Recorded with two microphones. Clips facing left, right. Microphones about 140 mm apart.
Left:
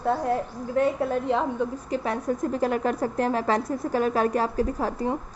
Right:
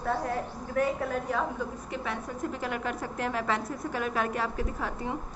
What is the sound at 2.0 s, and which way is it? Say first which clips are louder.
A woman's voice: left 8 dB; 40° left (ahead or behind).